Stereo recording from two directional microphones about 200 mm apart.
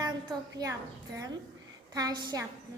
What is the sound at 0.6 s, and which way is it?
Speech, 15° right (ahead or behind).